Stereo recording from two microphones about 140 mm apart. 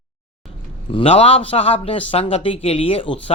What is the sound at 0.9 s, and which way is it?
A man's voice, 40° left (ahead or behind).